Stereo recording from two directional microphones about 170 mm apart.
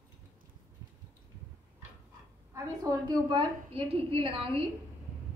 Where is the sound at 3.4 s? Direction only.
35° right (ahead or behind).